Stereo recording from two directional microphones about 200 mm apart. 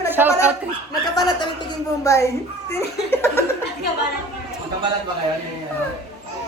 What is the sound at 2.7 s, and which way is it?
Chuckle, 15° left (ahead or behind).